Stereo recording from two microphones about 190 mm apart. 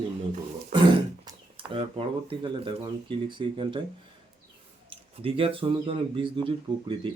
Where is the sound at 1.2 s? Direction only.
30° right (ahead or behind).